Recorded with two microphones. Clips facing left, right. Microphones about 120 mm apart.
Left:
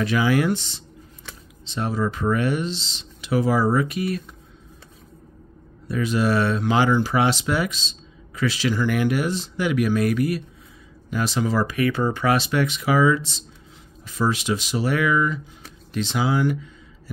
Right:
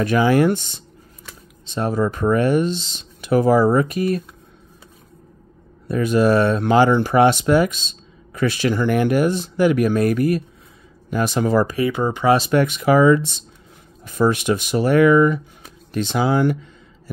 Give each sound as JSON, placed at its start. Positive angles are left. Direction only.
{"t": 0.0, "sound": "speech", "side_deg": -50}
{"t": 5.9, "sound": "speech", "side_deg": -45}
{"t": 11.9, "sound": "speech", "side_deg": -15}
{"t": 12.4, "sound": "speech", "side_deg": -45}